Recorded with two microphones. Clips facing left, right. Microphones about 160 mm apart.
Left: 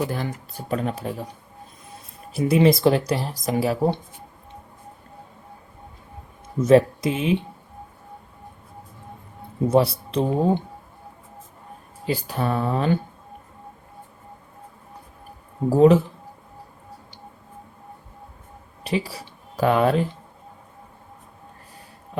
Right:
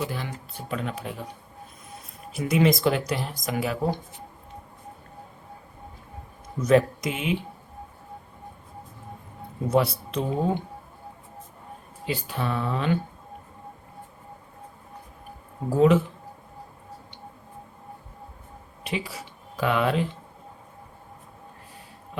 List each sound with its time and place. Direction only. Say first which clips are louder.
0.0 s speech: left 5 dB; 45° left (ahead or behind)
2.3 s speech: left 4 dB; 30° left (ahead or behind)
6.6 s speech: left 5 dB; 30° left (ahead or behind)
9.6 s speech: left 4 dB; 30° left (ahead or behind)
12.0 s speech: left 4 dB; 40° left (ahead or behind)
15.7 s speech: left 4 dB; 35° left (ahead or behind)
18.8 s speech: left 6 dB; 35° left (ahead or behind)